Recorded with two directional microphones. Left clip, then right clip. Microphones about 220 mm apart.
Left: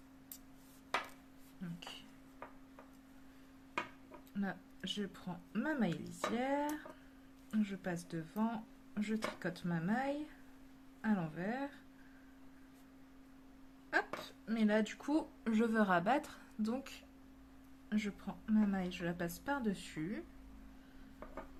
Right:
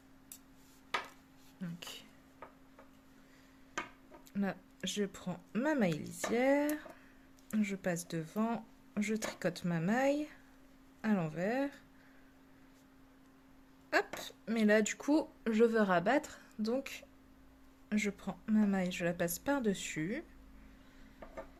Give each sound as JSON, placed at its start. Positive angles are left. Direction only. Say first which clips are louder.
{"t": 4.4, "sound": "speech", "louder": "right 4 dB", "side_deg": -35}
{"t": 14.4, "sound": "a woman's voice", "louder": "right 5 dB", "side_deg": -40}